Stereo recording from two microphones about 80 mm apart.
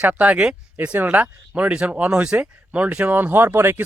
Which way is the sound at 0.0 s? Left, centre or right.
Centre.